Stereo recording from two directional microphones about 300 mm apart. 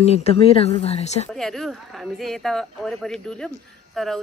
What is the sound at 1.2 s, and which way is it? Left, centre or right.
Speech, centre.